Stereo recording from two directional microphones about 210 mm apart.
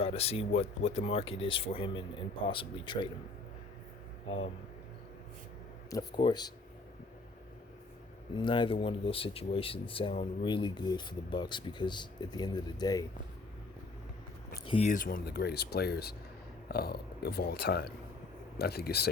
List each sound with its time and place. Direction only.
0.0 s speech: 30° left (ahead or behind)
5.9 s speech: 20° left (ahead or behind)
8.4 s speech: 25° left (ahead or behind)
14.7 s speech: 35° left (ahead or behind); by 19.0 s 50° left (ahead or behind)